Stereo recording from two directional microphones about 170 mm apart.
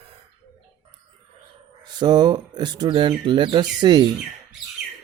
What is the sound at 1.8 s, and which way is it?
Speech, 25° right (ahead or behind).